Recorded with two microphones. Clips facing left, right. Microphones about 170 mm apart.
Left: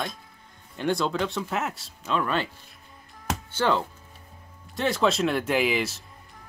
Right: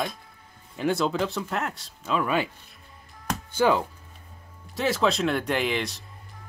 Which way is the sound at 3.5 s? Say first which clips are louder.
Right 3 dB; 10° right (ahead or behind).